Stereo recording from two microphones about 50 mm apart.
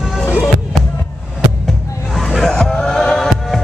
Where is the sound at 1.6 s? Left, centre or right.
Centre.